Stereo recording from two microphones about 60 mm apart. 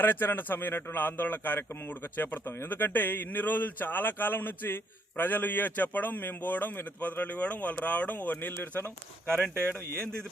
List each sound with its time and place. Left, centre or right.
0.0 s a man's voice: left
9.2 s speech: centre